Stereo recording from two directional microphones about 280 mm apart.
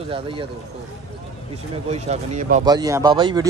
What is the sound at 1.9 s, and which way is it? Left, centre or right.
Speech, right.